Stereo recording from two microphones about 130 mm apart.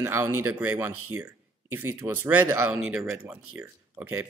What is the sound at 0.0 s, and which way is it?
Speech, 15° right (ahead or behind).